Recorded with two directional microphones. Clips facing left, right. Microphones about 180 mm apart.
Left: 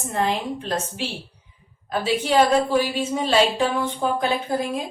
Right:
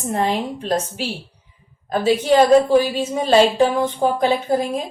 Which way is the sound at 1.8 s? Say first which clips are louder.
Right 6 dB; 45° right (ahead or behind).